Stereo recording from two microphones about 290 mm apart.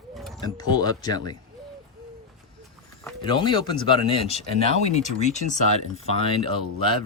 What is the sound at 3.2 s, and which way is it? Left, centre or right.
Speech, centre.